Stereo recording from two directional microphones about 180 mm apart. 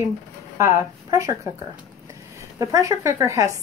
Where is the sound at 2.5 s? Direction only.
20° right (ahead or behind).